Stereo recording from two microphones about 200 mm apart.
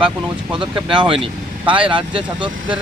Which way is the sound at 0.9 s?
25° right (ahead or behind).